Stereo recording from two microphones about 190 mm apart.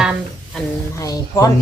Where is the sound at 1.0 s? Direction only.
15° left (ahead or behind).